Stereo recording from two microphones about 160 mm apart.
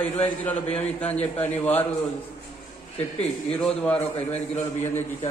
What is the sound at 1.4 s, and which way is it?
Speech, 10° left (ahead or behind).